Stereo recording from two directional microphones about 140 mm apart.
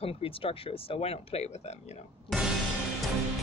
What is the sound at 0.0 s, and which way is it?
Speech, 40° left (ahead or behind).